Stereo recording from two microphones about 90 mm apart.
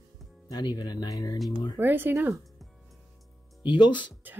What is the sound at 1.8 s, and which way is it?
Speech, 20° right (ahead or behind).